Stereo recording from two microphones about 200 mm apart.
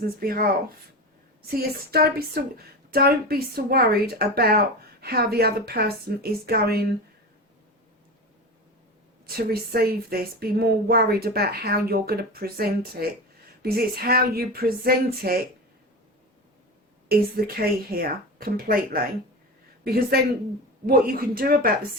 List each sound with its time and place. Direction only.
0.2 s speech: 45° right (ahead or behind)
1.5 s speech: 50° right (ahead or behind)
9.2 s speech: 50° right (ahead or behind)
17.1 s a woman's voice: 50° right (ahead or behind)